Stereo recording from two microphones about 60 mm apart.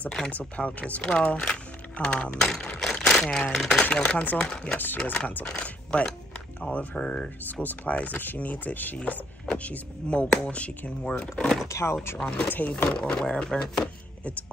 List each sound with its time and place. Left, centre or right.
0.3 s speech: left; by 3.8 s centre
3.9 s speech: left
4.4 s speech: centre
4.7 s speech: left
5.5 s speech: centre
6.6 s speech: left
7.0 s speech: centre
7.6 s speech: left
11.6 s speech: left
12.2 s speech: centre
12.9 s speech: centre